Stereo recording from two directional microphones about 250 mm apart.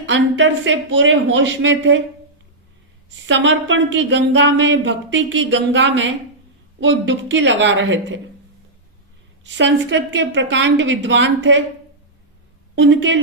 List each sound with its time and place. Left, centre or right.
0.0 s speech: right
3.2 s speech: right
9.4 s speech: right
12.7 s speech: right